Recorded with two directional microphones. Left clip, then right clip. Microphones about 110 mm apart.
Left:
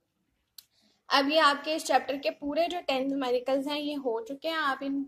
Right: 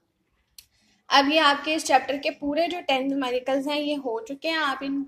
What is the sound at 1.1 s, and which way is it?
A woman's voice, 25° left (ahead or behind).